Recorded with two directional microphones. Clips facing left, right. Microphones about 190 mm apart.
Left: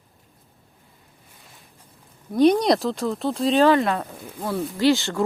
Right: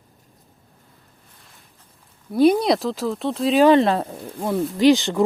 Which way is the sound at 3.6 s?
25° right (ahead or behind).